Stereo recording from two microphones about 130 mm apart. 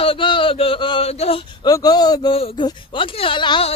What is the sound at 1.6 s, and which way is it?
Speech, 30° left (ahead or behind).